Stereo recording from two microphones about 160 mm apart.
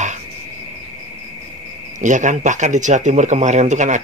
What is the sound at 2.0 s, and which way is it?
Speech, 50° right (ahead or behind).